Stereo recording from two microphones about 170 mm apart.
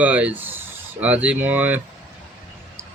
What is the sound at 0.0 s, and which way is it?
A man's voice, 10° right (ahead or behind).